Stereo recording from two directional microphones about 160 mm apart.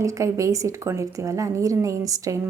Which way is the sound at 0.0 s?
20° right (ahead or behind).